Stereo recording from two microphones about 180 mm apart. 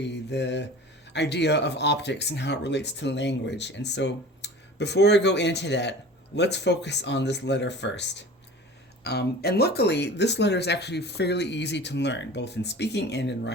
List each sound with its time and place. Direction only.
0.0 s speech: 75° left (ahead or behind)
9.0 s speech: 60° left (ahead or behind)